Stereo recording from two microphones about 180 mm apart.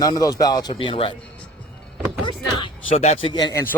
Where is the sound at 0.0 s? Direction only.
20° left (ahead or behind).